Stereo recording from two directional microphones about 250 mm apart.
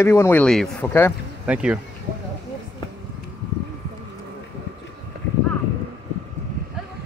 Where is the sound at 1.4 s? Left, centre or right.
Centre.